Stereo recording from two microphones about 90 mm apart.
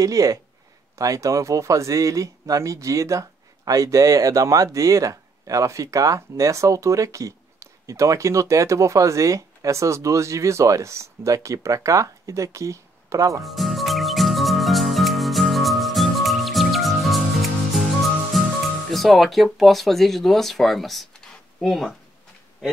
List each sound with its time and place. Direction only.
0.0 s speech: 40° right (ahead or behind)
13.4 s music: centre (ahead or behind)
18.3 s music: centre (ahead or behind)
18.9 s speech: centre (ahead or behind)